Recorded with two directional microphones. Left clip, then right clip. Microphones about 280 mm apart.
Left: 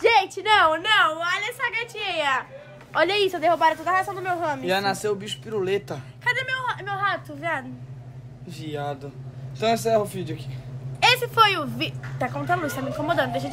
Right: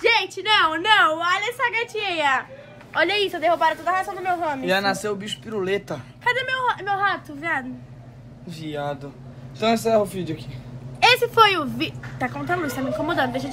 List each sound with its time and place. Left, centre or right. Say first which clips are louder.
0.0 s a sound: left 1 dB; left
0.7 s a woman's voice: right 3 dB; centre
4.6 s speech: right 2 dB; right
6.2 s a woman's voice: right 3 dB; centre
8.5 s speech: right 2 dB; centre
11.0 s a woman's voice: right 3 dB; centre